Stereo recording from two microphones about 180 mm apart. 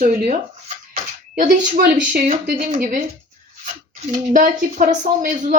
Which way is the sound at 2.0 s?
40° right (ahead or behind).